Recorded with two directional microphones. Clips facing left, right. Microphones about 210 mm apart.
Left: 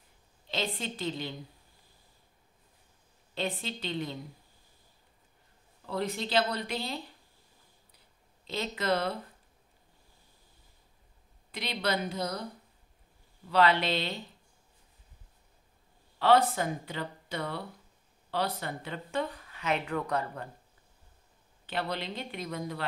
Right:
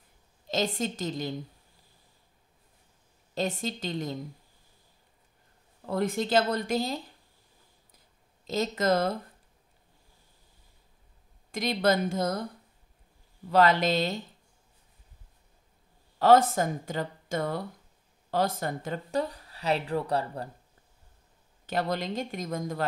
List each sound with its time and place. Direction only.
0.5 s speech: 45° right (ahead or behind)
3.3 s speech: 45° right (ahead or behind)
5.9 s speech: 50° right (ahead or behind)
8.5 s speech: 40° right (ahead or behind)
11.5 s speech: 45° right (ahead or behind)
13.5 s speech: 45° right (ahead or behind)
16.2 s speech: 45° right (ahead or behind)
21.6 s speech: 45° right (ahead or behind)